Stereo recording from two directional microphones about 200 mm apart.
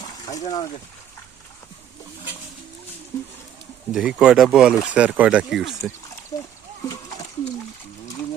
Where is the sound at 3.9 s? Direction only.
5° right (ahead or behind).